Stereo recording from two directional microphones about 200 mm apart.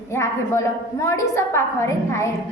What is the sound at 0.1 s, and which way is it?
A woman's voice, 15° left (ahead or behind).